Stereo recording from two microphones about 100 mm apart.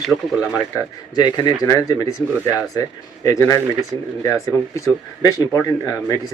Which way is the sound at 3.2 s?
35° left (ahead or behind).